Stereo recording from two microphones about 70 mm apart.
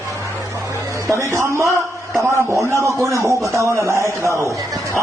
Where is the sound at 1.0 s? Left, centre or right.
Right.